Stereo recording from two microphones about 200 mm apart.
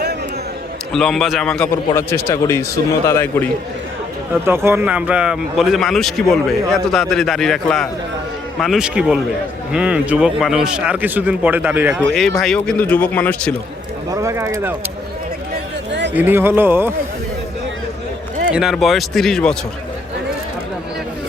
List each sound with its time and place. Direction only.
0.9 s speech: centre (ahead or behind)
4.4 s speech: 10° right (ahead or behind); by 13.5 s 10° left (ahead or behind)
14.1 s speech: 15° right (ahead or behind)
15.9 s a sound: 60° right (ahead or behind)
16.1 s speech: 10° right (ahead or behind)
18.5 s speech: centre (ahead or behind)